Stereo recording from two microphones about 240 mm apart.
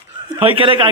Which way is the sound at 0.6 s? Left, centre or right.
Right.